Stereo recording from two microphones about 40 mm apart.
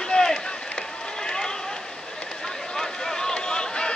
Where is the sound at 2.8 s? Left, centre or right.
Centre.